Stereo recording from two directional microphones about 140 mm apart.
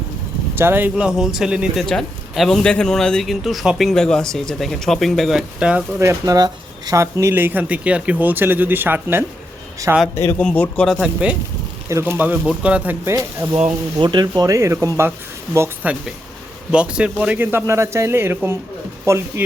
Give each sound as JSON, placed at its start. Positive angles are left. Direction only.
{"t": 0.5, "sound": "speech", "side_deg": -15}
{"t": 6.0, "sound": "speech", "side_deg": -25}
{"t": 10.2, "sound": "a man's voice", "side_deg": 15}
{"t": 11.0, "sound": "speech", "side_deg": -10}
{"t": 13.7, "sound": "speech", "side_deg": -30}